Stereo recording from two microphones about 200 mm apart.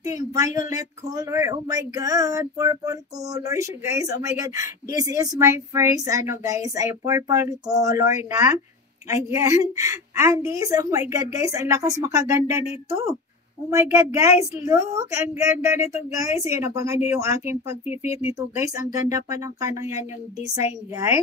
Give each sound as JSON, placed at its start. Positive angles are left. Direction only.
{"t": 0.0, "sound": "speech", "side_deg": -15}
{"t": 13.7, "sound": "speech", "side_deg": -15}
{"t": 17.8, "sound": "speech", "side_deg": 30}
{"t": 18.2, "sound": "speech", "side_deg": -15}